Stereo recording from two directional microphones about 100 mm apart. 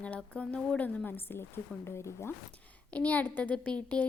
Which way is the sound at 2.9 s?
15° left (ahead or behind).